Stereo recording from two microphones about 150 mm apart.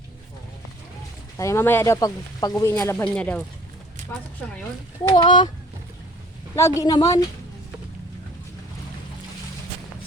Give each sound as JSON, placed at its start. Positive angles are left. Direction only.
{"t": 1.4, "sound": "speech", "side_deg": 20}
{"t": 5.1, "sound": "speech", "side_deg": 30}
{"t": 6.6, "sound": "speech", "side_deg": 20}